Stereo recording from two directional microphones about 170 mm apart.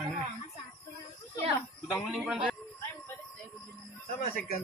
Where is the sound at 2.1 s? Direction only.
5° right (ahead or behind).